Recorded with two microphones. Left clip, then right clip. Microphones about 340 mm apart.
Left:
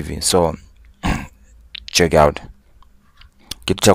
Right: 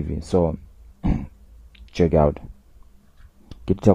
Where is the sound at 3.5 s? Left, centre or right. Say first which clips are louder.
Left 5 dB; left.